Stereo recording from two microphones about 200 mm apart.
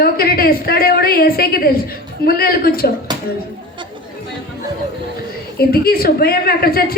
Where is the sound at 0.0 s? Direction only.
50° left (ahead or behind).